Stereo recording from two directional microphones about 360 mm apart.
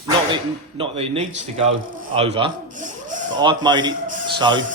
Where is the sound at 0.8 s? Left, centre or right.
Centre.